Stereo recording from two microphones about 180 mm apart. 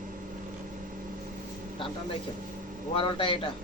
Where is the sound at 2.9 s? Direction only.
30° left (ahead or behind).